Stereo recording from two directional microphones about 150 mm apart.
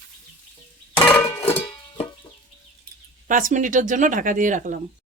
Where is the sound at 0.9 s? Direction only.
15° left (ahead or behind).